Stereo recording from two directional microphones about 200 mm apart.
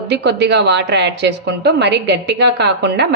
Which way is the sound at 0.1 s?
60° right (ahead or behind).